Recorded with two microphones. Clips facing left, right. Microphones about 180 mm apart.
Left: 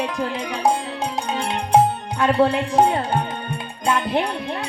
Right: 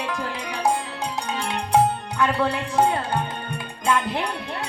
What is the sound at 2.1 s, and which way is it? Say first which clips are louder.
Speech: left 8 dB; 25° left (ahead or behind).